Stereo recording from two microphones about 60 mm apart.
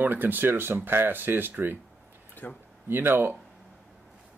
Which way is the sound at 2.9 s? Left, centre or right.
Right.